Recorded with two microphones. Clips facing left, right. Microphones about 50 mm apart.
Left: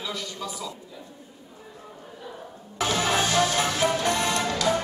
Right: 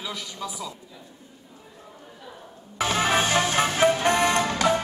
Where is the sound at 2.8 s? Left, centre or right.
Right.